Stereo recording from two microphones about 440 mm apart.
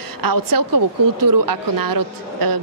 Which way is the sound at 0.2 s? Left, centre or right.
Right.